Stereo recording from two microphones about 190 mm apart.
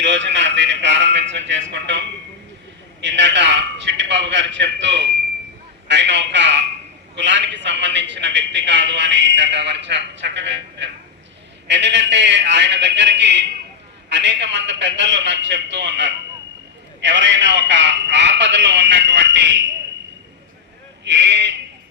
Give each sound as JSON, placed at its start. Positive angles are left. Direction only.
{"t": 0.0, "sound": "a man's voice", "side_deg": -65}
{"t": 21.0, "sound": "speech", "side_deg": -65}